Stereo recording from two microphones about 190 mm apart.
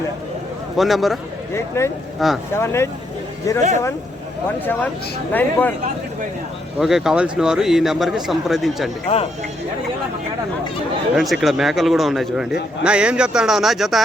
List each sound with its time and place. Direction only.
0.8 s speech: centre (ahead or behind)
1.5 s speech: 15° left (ahead or behind)
2.2 s speech: centre (ahead or behind)
2.6 s speech: 15° left (ahead or behind)
4.4 s speech: 10° left (ahead or behind)
6.7 s speech: centre (ahead or behind)
9.1 s speech: 30° left (ahead or behind)
11.1 s speech: centre (ahead or behind)